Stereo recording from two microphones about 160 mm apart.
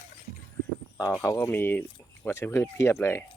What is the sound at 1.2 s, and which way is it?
Speech, 10° left (ahead or behind).